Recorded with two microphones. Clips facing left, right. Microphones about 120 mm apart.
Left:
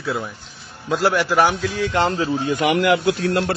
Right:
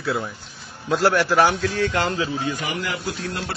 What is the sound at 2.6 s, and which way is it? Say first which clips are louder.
Speech: left 11 dB; 75° left (ahead or behind).